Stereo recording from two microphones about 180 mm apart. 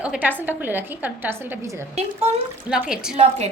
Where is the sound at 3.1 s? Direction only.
35° right (ahead or behind).